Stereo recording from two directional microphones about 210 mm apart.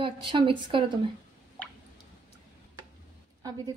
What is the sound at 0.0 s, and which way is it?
Speech, 25° right (ahead or behind).